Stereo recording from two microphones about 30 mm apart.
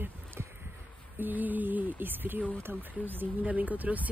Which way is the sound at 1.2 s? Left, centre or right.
Right.